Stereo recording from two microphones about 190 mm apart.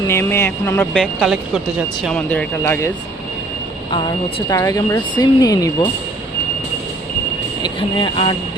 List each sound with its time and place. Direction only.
0.1 s speech: 15° left (ahead or behind)
0.9 s speech: centre (ahead or behind)
3.9 s speech: 25° left (ahead or behind)
7.6 s speech: 25° left (ahead or behind)